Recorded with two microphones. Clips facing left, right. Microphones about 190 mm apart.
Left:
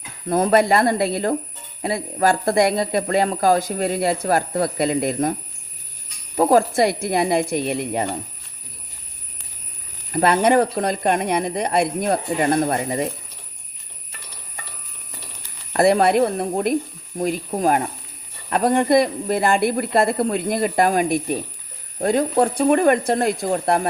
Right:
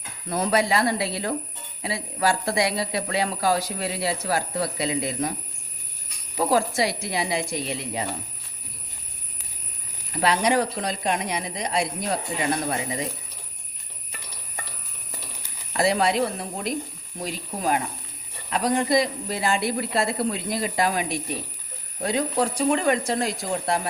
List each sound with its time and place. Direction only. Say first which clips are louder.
0.3 s speech: left 6 dB; 50° left (ahead or behind)
6.3 s speech: left 6 dB; 55° left (ahead or behind)
10.1 s speech: left 6 dB; 50° left (ahead or behind)
15.7 s speech: left 6 dB; 55° left (ahead or behind)